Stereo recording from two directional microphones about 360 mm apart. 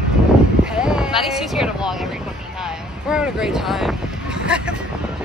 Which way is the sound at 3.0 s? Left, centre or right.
Centre.